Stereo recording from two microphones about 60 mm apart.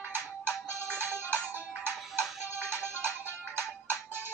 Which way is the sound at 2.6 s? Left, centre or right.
Right.